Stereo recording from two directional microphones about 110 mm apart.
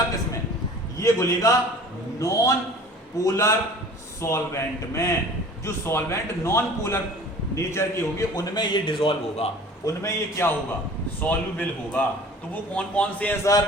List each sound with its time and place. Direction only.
0.9 s a man's voice: 30° left (ahead or behind)
8.5 s a man's voice: 45° left (ahead or behind)
9.8 s a man's voice: 25° left (ahead or behind)